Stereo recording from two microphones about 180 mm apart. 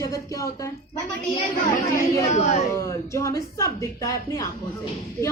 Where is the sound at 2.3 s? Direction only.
40° left (ahead or behind).